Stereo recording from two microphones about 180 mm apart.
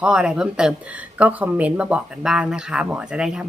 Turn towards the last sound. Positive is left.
turn(degrees=-5)  # may be behind; listen again after turning